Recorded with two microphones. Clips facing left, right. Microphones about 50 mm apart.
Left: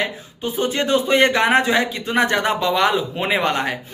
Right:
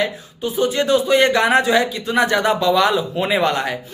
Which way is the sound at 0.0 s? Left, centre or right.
Left.